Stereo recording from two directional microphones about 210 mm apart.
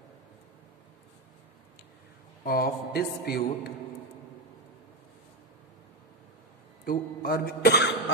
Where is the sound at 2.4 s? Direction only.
45° left (ahead or behind).